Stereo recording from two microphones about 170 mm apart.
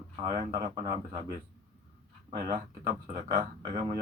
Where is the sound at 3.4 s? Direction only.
20° right (ahead or behind).